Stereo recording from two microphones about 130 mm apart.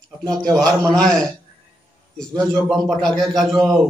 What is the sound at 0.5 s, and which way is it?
Speech, 30° right (ahead or behind).